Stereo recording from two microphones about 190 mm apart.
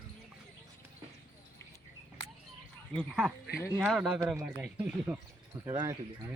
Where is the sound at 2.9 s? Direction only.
Centre (ahead or behind).